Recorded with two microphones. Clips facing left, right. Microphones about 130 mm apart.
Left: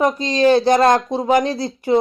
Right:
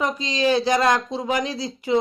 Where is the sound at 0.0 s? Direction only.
50° left (ahead or behind).